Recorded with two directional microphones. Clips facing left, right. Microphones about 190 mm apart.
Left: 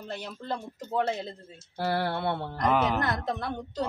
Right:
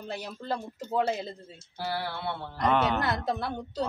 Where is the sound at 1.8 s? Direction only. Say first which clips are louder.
Left 5 dB; 55° left (ahead or behind).